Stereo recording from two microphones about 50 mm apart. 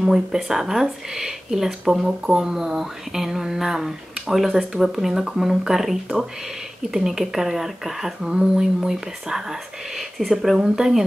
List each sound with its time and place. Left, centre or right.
0.0 s speech: centre